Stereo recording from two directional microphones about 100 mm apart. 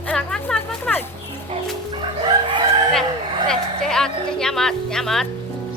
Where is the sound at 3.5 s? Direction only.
5° left (ahead or behind).